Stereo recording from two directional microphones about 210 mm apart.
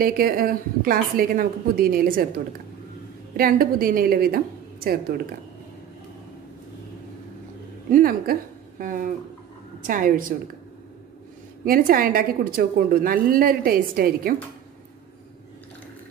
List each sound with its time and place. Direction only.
0.0 s a woman's voice: 45° right (ahead or behind)
3.3 s a woman's voice: 45° right (ahead or behind)
7.9 s a woman's voice: 45° right (ahead or behind)
11.6 s a woman's voice: 45° right (ahead or behind)